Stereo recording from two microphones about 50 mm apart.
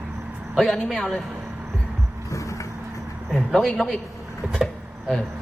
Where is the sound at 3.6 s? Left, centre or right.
Centre.